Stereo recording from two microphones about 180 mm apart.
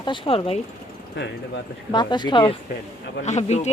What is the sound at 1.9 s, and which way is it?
Speech, 25° left (ahead or behind).